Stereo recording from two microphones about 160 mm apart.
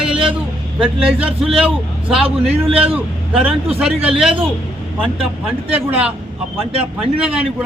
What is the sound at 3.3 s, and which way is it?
Speech, 5° right (ahead or behind).